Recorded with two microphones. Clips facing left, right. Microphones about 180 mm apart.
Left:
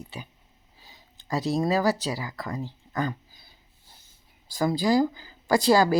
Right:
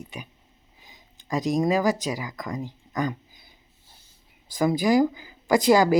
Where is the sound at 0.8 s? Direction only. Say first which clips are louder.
Even; 15° right (ahead or behind).